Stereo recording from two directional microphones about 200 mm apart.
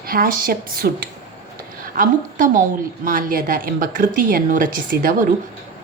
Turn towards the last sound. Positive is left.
turn(degrees=-45)  # may be behind; listen again after turning